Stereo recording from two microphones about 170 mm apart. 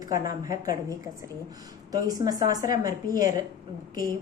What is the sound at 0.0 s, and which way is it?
Speech, 20° right (ahead or behind).